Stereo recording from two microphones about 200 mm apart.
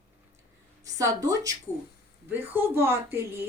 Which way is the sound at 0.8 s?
15° right (ahead or behind).